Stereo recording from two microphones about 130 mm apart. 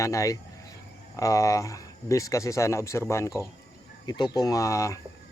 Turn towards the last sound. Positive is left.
turn(degrees=25)  # may be behind; listen again after turning